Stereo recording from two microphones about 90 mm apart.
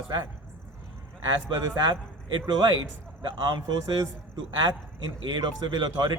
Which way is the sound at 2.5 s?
50° right (ahead or behind).